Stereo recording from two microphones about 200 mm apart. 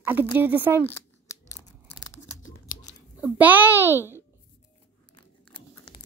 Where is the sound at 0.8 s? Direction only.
10° left (ahead or behind).